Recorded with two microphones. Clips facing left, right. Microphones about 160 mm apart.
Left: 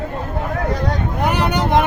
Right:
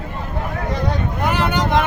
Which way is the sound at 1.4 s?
15° left (ahead or behind).